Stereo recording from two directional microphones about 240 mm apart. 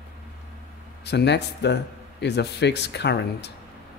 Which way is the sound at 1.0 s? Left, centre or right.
Left.